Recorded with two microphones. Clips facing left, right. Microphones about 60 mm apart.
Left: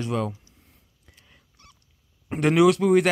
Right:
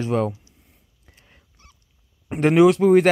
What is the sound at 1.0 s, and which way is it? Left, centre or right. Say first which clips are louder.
Dog: right 2 dB; right.